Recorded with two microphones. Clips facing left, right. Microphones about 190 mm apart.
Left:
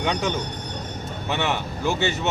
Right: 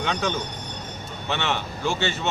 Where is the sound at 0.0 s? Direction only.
10° left (ahead or behind).